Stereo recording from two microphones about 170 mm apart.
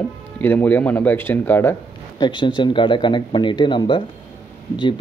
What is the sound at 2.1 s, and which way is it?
Speech, 25° left (ahead or behind).